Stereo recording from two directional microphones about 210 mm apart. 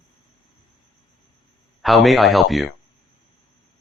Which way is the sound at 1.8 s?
Centre (ahead or behind).